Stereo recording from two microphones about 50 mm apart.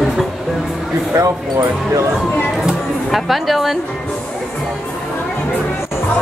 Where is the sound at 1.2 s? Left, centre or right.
Right.